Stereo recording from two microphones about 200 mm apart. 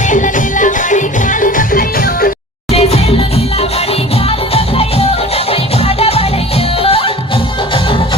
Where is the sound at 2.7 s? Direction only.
30° left (ahead or behind).